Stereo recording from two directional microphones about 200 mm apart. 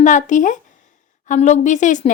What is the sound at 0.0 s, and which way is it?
A woman's voice, 40° left (ahead or behind).